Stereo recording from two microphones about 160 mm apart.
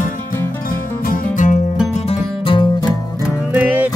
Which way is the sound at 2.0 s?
35° left (ahead or behind).